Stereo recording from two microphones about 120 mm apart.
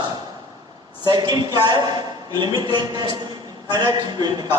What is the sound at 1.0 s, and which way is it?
Speech, 35° right (ahead or behind).